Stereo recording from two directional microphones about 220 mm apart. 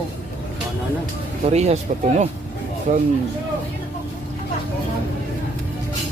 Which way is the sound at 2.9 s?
35° right (ahead or behind).